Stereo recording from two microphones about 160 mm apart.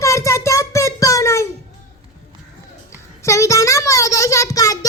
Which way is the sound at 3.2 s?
20° left (ahead or behind).